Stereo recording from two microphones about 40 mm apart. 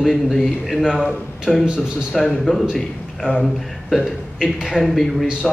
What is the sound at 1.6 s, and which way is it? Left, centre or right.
Speech, right.